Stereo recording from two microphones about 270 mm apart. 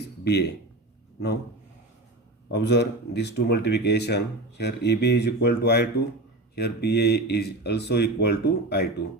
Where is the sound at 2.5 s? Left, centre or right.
Left.